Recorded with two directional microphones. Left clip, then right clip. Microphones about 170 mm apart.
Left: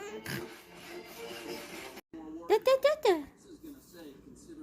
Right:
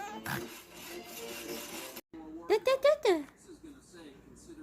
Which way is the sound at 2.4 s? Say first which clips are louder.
Left 1 dB; 5° right (ahead or behind).